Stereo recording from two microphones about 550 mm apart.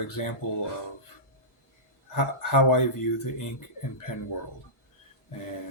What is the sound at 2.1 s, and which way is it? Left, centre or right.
Speech, left.